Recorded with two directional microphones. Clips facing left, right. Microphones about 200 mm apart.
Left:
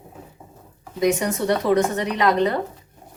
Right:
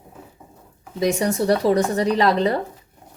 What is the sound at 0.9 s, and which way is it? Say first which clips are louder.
Speech: even; 30° right (ahead or behind).